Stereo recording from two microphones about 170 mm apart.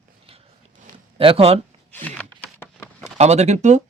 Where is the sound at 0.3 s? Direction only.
35° right (ahead or behind).